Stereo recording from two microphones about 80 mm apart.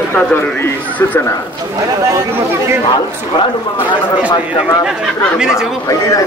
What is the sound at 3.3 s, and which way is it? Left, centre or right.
Speech, left.